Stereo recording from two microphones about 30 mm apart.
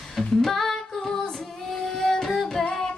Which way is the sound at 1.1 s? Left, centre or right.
Centre.